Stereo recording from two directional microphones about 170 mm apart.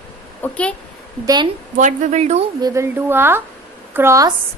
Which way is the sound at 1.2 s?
25° right (ahead or behind).